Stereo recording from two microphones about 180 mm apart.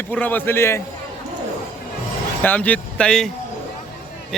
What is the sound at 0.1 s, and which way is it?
Speech, 10° left (ahead or behind).